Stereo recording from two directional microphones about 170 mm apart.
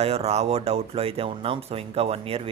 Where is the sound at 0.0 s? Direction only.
35° right (ahead or behind).